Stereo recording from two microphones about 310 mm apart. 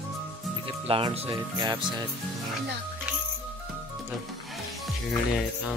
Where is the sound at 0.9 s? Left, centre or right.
Centre.